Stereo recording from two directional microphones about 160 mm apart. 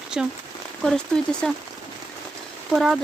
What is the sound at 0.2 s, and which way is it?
Speech, 5° right (ahead or behind).